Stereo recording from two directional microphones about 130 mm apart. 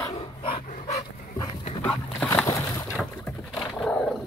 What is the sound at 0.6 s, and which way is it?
Dog, 70° left (ahead or behind).